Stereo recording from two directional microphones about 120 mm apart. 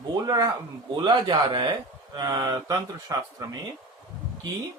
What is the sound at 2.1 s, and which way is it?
Speech, 35° right (ahead or behind).